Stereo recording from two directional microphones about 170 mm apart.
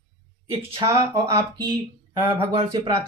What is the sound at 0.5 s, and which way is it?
Speech, 30° right (ahead or behind).